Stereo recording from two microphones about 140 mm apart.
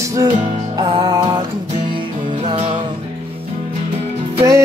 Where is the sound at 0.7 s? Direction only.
30° right (ahead or behind).